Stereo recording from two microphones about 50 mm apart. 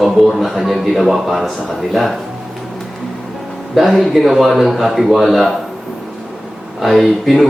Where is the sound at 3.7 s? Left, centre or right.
Centre.